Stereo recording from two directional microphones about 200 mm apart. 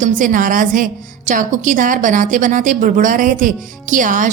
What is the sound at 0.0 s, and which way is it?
A woman's voice, 40° right (ahead or behind).